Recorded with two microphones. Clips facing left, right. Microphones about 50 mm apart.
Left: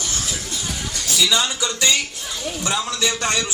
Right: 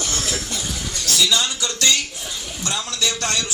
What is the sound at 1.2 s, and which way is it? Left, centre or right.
A man's voice, centre.